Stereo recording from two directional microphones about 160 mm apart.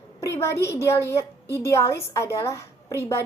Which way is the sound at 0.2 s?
15° left (ahead or behind).